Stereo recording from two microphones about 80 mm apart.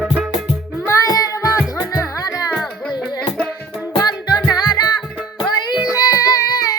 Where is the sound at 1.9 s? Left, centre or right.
Left.